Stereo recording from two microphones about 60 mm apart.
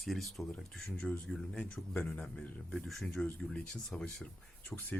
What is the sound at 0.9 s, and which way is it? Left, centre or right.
Speech, centre.